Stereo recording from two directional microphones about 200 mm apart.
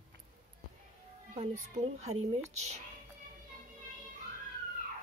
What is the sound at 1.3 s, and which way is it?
Speech, 30° right (ahead or behind).